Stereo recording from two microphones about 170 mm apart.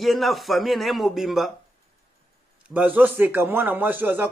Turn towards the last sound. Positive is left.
turn(degrees=-10)  # may be behind; listen again after turning